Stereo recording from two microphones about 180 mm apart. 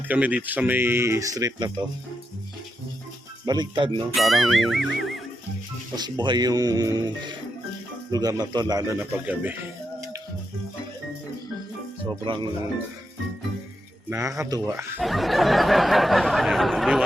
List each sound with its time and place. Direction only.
0.1 s speech: 10° right (ahead or behind)
3.4 s speech: 20° right (ahead or behind)
4.1 s a sound: centre (ahead or behind)
6.0 s speech: 25° right (ahead or behind)
9.1 s speech: 10° right (ahead or behind)
12.0 s speech: 25° right (ahead or behind)
14.1 s speech: 15° right (ahead or behind)
14.9 s a sound: centre (ahead or behind)